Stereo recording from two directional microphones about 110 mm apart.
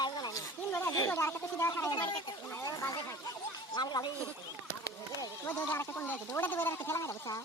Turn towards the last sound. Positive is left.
turn(degrees=30)  # may be behind; listen again after turning